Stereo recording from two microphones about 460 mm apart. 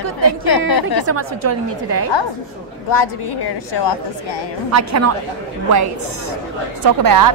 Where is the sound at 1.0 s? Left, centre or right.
Right.